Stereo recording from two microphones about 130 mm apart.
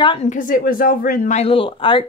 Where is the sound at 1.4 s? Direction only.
45° left (ahead or behind).